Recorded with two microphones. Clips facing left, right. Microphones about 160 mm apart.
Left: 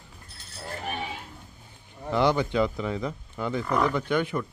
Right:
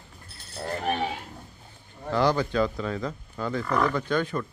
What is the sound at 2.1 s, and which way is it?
Speech, 20° left (ahead or behind).